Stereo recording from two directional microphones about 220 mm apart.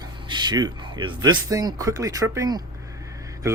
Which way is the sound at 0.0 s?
20° right (ahead or behind).